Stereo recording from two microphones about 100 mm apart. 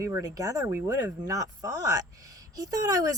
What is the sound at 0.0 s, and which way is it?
Speech, 30° right (ahead or behind).